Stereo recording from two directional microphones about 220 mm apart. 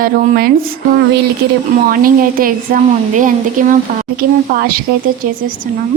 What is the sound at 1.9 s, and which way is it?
A woman's voice, 40° right (ahead or behind).